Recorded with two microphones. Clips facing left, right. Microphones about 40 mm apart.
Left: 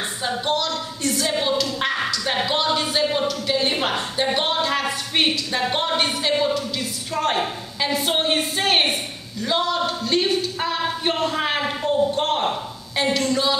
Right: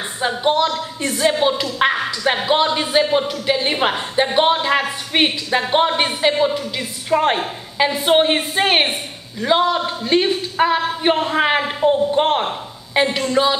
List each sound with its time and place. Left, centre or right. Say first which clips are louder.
0.2 s a woman's voice: right 7 dB; right